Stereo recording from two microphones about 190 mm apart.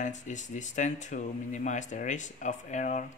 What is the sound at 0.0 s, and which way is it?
Speech, 40° left (ahead or behind).